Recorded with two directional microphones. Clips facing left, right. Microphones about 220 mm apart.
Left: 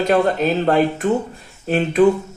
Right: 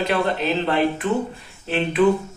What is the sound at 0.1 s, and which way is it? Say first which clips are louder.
Speech: left 5 dB; 45° left (ahead or behind).